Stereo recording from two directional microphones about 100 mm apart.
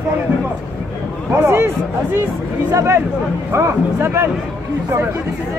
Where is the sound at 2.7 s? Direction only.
30° right (ahead or behind).